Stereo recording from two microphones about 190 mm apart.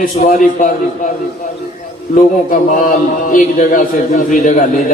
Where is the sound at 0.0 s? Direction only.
45° left (ahead or behind).